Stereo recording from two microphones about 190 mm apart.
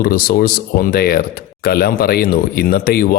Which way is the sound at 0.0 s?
50° left (ahead or behind).